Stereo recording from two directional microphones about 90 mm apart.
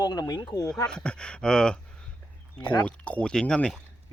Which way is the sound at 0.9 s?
10° left (ahead or behind).